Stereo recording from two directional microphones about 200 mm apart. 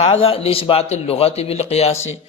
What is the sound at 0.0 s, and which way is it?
Speech, 30° left (ahead or behind).